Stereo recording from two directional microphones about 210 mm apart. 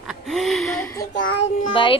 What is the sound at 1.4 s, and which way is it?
Speech, 25° left (ahead or behind).